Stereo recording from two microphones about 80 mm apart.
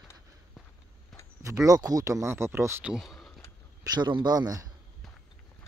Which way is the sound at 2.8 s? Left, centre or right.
Centre.